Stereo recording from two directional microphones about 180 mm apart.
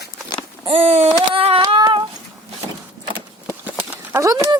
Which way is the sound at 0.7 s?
35° right (ahead or behind).